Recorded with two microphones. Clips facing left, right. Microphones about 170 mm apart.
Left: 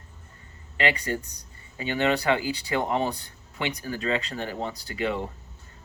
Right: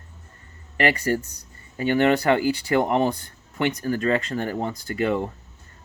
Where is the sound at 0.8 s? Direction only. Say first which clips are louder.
Right 5 dB; 45° right (ahead or behind).